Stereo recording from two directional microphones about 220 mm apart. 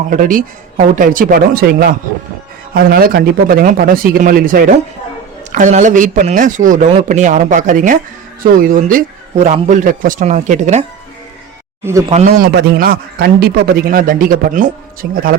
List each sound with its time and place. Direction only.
0.1 s a man's voice: 35° right (ahead or behind)
11.9 s speech: 15° right (ahead or behind)
12.4 s a man's voice: 50° right (ahead or behind)